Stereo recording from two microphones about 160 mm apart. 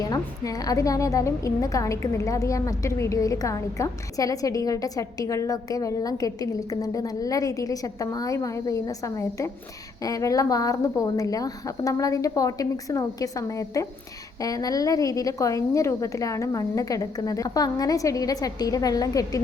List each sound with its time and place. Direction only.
0.1 s a woman's voice: 20° left (ahead or behind)